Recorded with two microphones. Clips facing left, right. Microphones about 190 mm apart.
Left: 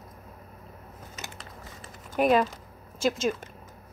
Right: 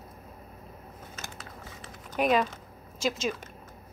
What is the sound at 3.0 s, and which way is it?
Speech, 50° left (ahead or behind).